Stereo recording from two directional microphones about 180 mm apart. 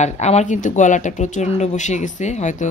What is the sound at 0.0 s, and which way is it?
Speech, 40° left (ahead or behind).